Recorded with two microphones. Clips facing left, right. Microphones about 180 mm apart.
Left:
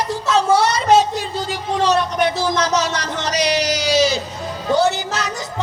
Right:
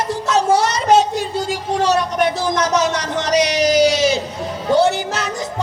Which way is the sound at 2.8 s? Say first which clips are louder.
Right 3 dB; 50° right (ahead or behind).